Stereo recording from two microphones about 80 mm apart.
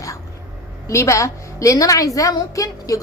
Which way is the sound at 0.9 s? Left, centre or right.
Left.